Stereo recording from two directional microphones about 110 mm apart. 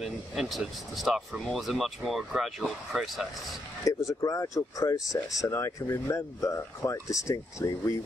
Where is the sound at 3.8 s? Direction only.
30° left (ahead or behind).